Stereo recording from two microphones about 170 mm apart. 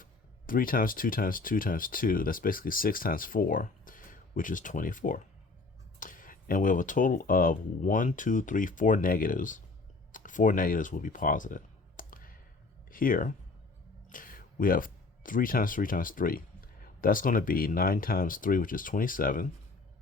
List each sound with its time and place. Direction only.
0.0 s speech: 55° left (ahead or behind)
10.1 s a sound: 50° left (ahead or behind)
12.9 s speech: 55° left (ahead or behind)